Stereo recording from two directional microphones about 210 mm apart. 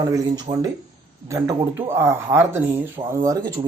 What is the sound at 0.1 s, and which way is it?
A man's voice, 20° right (ahead or behind).